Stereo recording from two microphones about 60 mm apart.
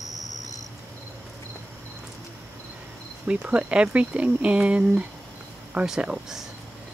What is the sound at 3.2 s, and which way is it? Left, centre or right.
Speech, centre.